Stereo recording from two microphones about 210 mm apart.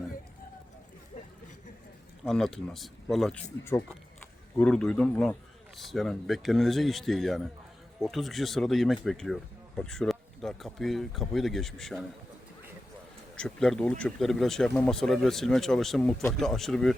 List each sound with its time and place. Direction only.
1.1 s chatter: 35° left (ahead or behind)
2.2 s speech: 5° left (ahead or behind)
13.3 s speech: 5° left (ahead or behind)